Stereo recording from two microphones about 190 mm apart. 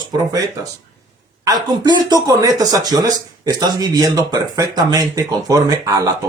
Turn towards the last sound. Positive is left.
turn(degrees=-20)  # may be behind; listen again after turning